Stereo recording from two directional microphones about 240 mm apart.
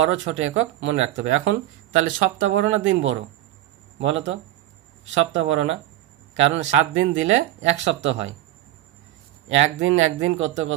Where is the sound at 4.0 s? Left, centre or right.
Right.